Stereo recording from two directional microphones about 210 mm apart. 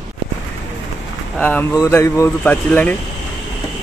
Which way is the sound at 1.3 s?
10° left (ahead or behind).